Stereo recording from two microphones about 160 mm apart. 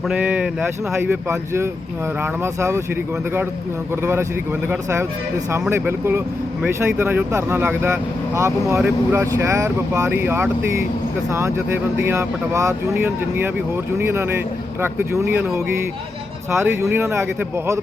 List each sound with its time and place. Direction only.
0.1 s speech: 10° right (ahead or behind)
4.0 s speech: 15° right (ahead or behind)